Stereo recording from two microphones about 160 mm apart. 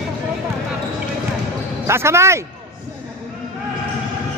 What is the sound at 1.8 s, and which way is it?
Speech, 15° right (ahead or behind).